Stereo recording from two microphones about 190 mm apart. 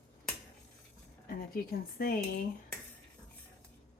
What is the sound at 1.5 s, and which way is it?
Speech, 50° left (ahead or behind).